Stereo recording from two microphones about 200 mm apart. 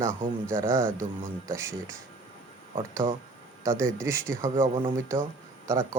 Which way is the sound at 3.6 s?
15° right (ahead or behind).